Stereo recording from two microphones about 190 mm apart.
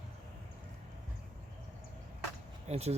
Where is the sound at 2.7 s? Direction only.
35° right (ahead or behind).